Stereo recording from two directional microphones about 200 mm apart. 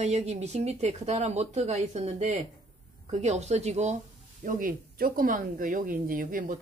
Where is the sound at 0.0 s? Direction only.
35° right (ahead or behind).